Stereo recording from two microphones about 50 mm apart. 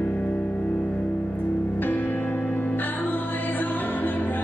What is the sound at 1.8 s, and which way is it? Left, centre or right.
Music, left.